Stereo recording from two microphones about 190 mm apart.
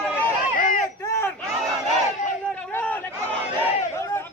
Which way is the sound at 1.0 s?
15° left (ahead or behind).